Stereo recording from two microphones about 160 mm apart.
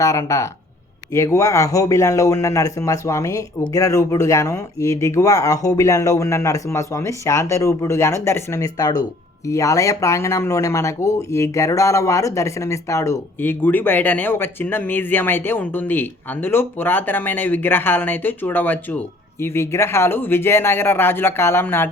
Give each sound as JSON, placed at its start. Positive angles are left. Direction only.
{"t": 0.0, "sound": "speech", "side_deg": 20}